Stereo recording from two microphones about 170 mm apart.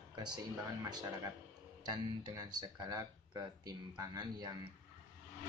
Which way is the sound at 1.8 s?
25° right (ahead or behind).